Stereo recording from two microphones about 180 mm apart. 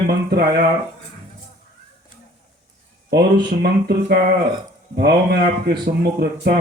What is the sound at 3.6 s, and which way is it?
Speech, 60° right (ahead or behind).